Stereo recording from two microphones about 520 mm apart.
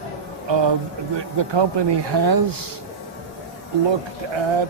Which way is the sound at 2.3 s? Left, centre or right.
Right.